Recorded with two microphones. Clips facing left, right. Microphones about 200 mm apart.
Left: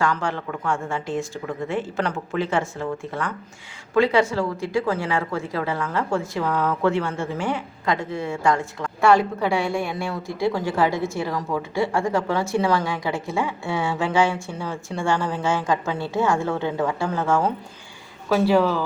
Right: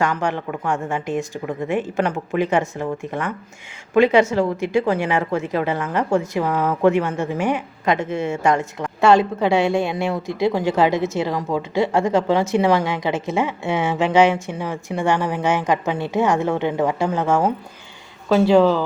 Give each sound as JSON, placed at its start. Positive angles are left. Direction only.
{"t": 0.0, "sound": "a woman's voice", "side_deg": -20}